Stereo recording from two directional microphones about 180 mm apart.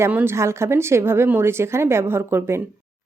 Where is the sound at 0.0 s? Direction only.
10° right (ahead or behind).